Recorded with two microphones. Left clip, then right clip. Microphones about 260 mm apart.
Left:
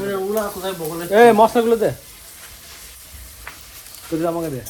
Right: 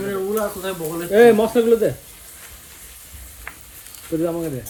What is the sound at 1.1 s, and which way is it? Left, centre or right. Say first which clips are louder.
Speech: left 2 dB; centre.